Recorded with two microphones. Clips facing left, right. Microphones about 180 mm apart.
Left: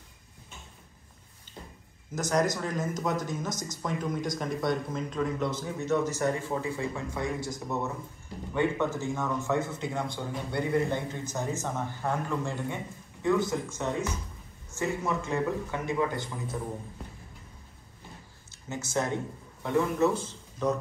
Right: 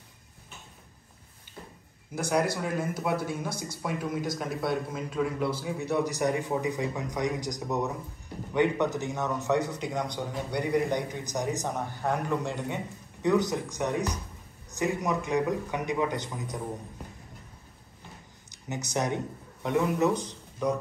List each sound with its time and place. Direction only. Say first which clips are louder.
2.1 s speech: even; 10° right (ahead or behind)
18.5 s a man's voice: even; 20° right (ahead or behind)